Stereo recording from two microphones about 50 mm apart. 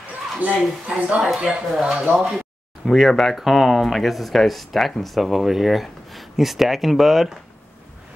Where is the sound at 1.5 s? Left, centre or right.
Centre.